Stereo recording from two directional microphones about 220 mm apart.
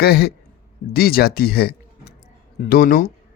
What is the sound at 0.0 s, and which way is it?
Speech, 45° left (ahead or behind).